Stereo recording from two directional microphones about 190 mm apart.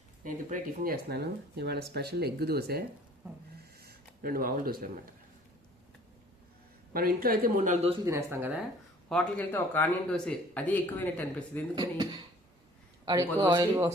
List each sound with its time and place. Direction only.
0.5 s speech: 50° right (ahead or behind)
3.8 s a sound: 50° right (ahead or behind)
6.9 s speech: 50° right (ahead or behind)
8.0 s speech: 15° right (ahead or behind)
9.0 s speech: 5° left (ahead or behind)
11.7 s speech: 20° right (ahead or behind)
13.1 s speech: 20° right (ahead or behind)